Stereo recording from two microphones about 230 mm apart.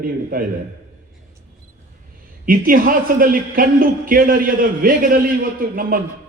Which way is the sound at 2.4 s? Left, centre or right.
Right.